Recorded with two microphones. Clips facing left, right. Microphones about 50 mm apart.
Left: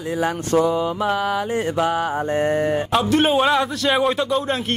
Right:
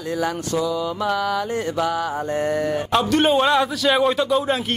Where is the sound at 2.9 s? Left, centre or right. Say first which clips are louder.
Right 1 dB; centre.